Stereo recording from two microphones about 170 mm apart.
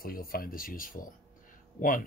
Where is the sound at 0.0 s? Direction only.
60° left (ahead or behind).